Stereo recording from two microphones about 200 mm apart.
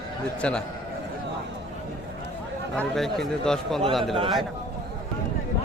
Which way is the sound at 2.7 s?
Centre (ahead or behind).